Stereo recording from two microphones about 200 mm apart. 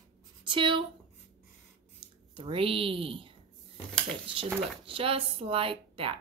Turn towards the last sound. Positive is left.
turn(degrees=-25)  # may be behind; listen again after turning